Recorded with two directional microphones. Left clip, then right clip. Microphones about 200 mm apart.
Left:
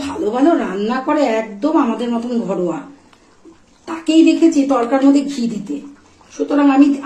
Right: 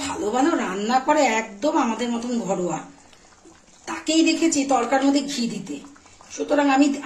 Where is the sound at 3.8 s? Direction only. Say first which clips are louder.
Left 8 dB; 15° right (ahead or behind).